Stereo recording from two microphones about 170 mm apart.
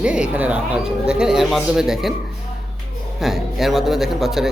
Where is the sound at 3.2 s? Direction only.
Centre (ahead or behind).